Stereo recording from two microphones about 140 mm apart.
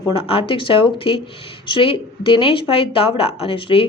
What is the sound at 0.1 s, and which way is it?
Speech, 40° left (ahead or behind).